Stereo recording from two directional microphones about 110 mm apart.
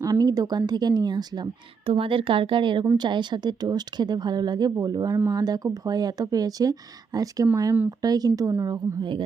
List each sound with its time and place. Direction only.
0.0 s speech: 35° right (ahead or behind)
1.9 s speech: 55° right (ahead or behind)